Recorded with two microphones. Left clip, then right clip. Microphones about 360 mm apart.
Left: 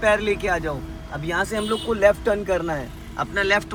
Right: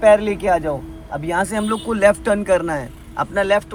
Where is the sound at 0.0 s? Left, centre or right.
Centre.